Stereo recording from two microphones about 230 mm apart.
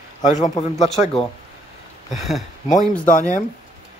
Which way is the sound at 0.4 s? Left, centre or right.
Left.